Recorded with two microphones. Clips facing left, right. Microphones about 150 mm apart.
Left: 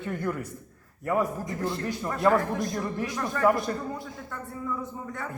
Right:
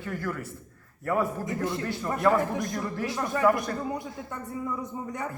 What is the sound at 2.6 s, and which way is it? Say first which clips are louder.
Speech: left 1 dB; 20° left (ahead or behind).